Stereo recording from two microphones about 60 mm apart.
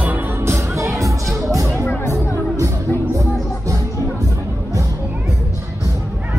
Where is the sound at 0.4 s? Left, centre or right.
Right.